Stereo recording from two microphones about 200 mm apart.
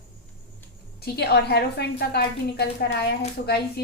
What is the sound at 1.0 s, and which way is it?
A woman's voice, 55° left (ahead or behind).